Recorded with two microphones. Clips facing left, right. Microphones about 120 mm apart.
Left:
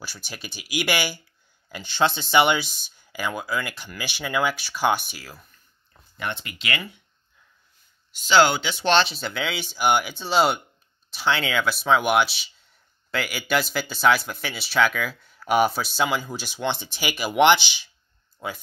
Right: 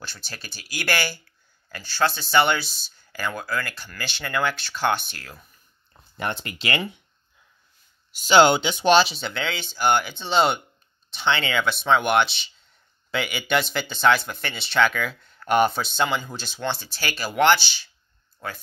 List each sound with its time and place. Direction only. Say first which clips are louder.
0.0 s speech: left 2 dB; 10° left (ahead or behind)
6.1 s speech: right 2 dB; 40° right (ahead or behind)
8.1 s speech: right 2 dB; 20° right (ahead or behind); by 18.6 s 10° left (ahead or behind)